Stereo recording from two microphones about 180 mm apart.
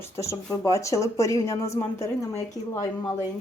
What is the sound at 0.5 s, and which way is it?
A woman's voice, 15° left (ahead or behind).